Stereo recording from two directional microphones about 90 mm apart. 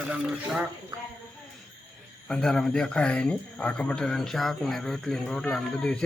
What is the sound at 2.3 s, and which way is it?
Speech, 5° left (ahead or behind).